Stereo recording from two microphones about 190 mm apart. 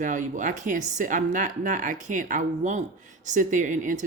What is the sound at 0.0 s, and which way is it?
Speech, 40° right (ahead or behind).